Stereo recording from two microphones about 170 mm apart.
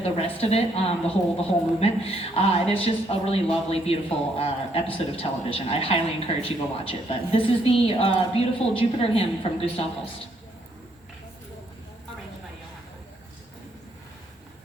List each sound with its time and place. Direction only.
0.0 s speech: 35° left (ahead or behind)